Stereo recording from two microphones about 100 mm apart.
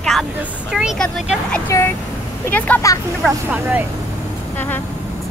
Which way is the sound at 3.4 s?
15° right (ahead or behind).